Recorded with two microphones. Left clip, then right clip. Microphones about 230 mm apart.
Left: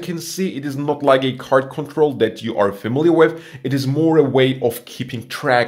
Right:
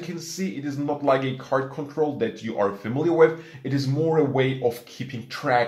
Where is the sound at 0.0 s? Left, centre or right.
Left.